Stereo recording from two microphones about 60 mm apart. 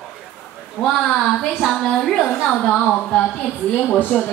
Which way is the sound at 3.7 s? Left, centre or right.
Left.